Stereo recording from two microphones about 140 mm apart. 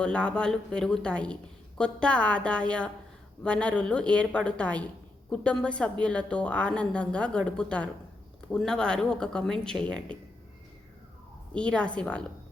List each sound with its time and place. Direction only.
0.0 s a woman's voice: 10° left (ahead or behind)
11.5 s a woman's voice: 10° left (ahead or behind)